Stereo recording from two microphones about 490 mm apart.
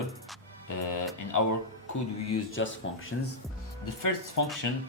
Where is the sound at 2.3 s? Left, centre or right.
Left.